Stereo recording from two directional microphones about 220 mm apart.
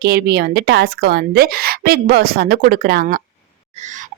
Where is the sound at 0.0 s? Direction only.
45° right (ahead or behind).